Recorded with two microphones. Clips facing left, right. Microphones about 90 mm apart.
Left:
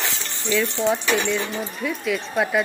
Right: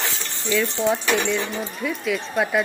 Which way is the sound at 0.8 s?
Centre (ahead or behind).